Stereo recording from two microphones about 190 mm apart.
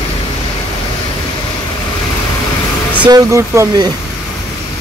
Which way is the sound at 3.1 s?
15° right (ahead or behind).